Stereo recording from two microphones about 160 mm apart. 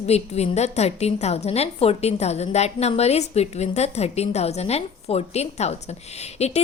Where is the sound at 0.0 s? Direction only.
40° left (ahead or behind).